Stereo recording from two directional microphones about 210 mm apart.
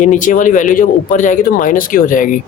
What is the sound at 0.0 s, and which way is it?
Speech, 35° left (ahead or behind).